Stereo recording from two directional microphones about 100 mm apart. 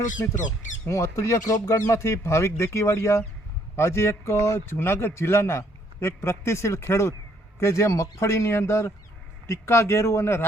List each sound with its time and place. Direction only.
0.9 s a man's voice: 30° left (ahead or behind)